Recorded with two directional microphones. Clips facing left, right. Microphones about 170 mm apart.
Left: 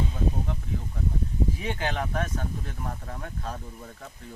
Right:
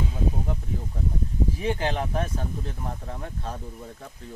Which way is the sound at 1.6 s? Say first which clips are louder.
Right 3 dB; 30° right (ahead or behind).